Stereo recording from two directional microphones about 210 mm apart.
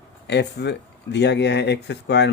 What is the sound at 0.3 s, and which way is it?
Speech, 55° left (ahead or behind).